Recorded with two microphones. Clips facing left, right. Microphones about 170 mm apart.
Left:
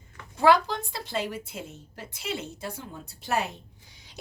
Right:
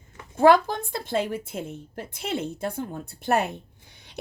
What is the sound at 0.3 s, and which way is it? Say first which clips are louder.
A woman's voice: right 4 dB; 50° right (ahead or behind).